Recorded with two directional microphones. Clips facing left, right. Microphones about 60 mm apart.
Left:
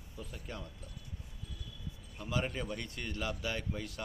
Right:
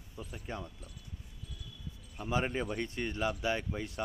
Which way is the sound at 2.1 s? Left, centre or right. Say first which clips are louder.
Right 4 dB; right.